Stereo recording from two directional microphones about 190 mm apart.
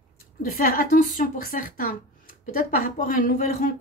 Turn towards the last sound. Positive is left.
turn(degrees=45)  # may be behind; listen again after turning